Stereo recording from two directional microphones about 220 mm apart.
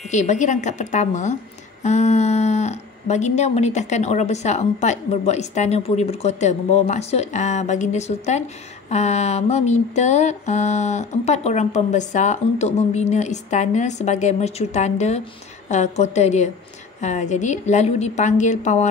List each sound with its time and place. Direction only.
0.1 s a woman's voice: 30° left (ahead or behind)